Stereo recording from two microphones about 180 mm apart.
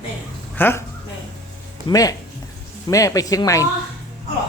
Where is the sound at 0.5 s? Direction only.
10° left (ahead or behind).